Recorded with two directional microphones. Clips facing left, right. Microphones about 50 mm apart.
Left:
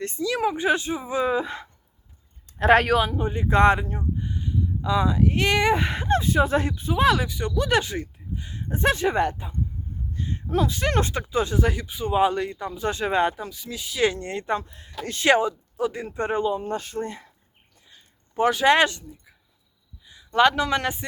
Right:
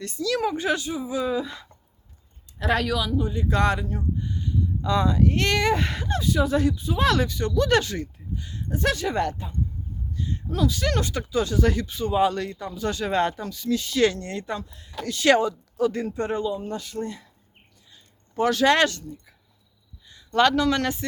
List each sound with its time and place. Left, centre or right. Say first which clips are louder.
0.0 s speech: left 1 dB; left
0.9 s speech: left 2 dB; left
6.1 s speech: left 3 dB; left
6.9 s speech: left 5 dB; centre
10.2 s speech: left 2 dB; left; by 14.2 s centre
14.2 s speech: left 4 dB; left
15.3 s speech: even; centre
16.1 s speech: left 2 dB; left